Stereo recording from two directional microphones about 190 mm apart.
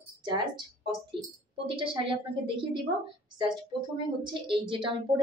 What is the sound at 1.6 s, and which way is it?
A woman's voice, 25° right (ahead or behind).